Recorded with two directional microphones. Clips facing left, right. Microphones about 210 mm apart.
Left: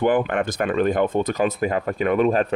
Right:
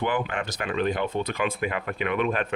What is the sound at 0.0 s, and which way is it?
Speech, 55° left (ahead or behind).